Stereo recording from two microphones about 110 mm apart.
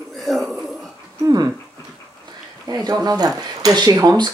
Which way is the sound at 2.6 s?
35° right (ahead or behind).